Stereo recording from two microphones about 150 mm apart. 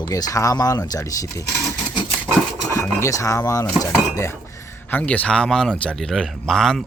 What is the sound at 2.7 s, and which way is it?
Speech, 20° left (ahead or behind).